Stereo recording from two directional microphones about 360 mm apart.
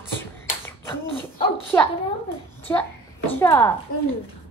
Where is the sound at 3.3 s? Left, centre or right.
Centre.